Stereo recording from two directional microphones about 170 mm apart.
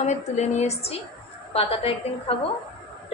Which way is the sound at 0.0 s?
40° left (ahead or behind).